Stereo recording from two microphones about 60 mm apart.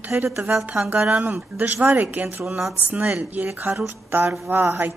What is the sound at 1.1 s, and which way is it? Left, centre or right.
Speech, right.